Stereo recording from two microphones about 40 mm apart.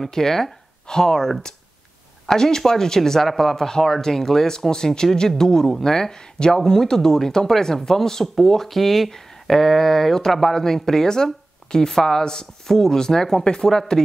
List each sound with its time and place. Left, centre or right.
0.0 s speech: centre
2.3 s speech: centre